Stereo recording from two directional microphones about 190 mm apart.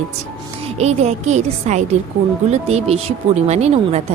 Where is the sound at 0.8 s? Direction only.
35° right (ahead or behind).